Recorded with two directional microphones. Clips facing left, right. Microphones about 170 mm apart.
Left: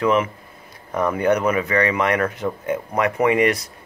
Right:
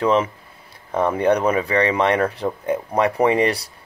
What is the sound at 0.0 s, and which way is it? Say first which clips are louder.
Speech: right 1 dB; 30° right (ahead or behind).